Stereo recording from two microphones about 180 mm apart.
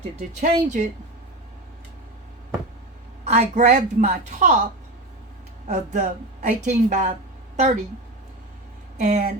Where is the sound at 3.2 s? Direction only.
40° right (ahead or behind).